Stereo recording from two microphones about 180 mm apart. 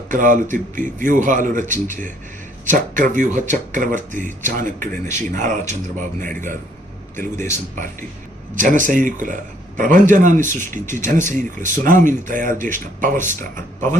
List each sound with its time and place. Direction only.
0.1 s speech: 45° right (ahead or behind)
7.3 s speech: 15° left (ahead or behind)
8.5 s speech: 45° right (ahead or behind)